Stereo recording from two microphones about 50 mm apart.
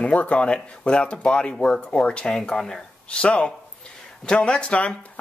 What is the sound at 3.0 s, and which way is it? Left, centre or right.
Speech, left.